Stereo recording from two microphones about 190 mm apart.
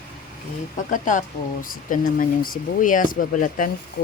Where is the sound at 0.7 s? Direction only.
40° left (ahead or behind).